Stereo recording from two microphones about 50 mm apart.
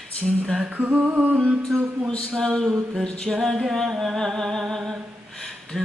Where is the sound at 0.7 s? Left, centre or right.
Right.